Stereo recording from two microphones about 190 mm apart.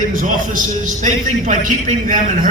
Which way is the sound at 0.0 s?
45° right (ahead or behind).